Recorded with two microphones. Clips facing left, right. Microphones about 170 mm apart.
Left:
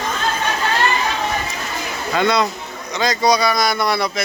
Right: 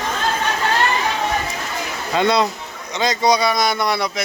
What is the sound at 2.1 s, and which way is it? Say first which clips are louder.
A man's voice: right 1 dB; 30° right (ahead or behind).